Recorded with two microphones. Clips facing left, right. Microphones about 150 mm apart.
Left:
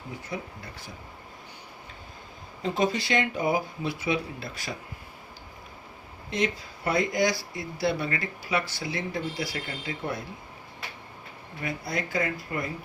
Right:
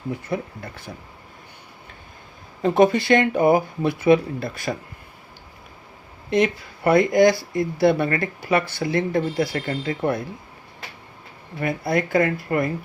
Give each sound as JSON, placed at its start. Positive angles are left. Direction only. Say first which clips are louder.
{"t": 0.3, "sound": "speech", "louder": "right 8 dB", "side_deg": -60}
{"t": 2.6, "sound": "speech", "louder": "right 10 dB", "side_deg": -55}
{"t": 6.3, "sound": "speech", "louder": "right 8 dB", "side_deg": -60}
{"t": 11.6, "sound": "speech", "louder": "right 9 dB", "side_deg": -55}